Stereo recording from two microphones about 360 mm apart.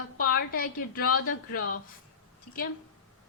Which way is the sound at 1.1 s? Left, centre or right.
Left.